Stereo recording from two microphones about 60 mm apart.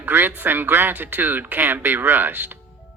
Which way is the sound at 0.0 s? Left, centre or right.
Right.